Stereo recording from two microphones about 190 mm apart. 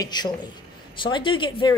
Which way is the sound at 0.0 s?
20° left (ahead or behind).